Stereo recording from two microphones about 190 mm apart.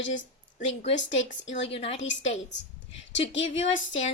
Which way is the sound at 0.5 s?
40° left (ahead or behind).